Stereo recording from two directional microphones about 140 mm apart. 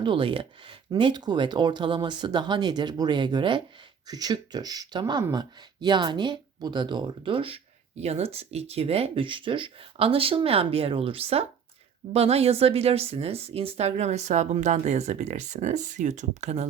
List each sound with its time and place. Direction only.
0.0 s speech: 35° right (ahead or behind); by 16.6 s 55° right (ahead or behind)